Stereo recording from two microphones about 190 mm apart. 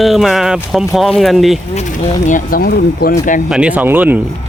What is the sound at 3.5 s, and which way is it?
Speech, 5° right (ahead or behind).